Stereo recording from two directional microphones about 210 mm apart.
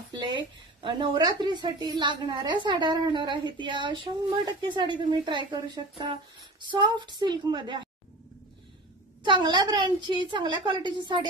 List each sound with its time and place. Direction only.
0.7 s a woman's voice: 20° right (ahead or behind)
9.2 s a woman's voice: 20° right (ahead or behind)